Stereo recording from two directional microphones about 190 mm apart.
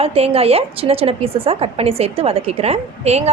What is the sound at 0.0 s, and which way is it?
A woman's voice, 30° right (ahead or behind).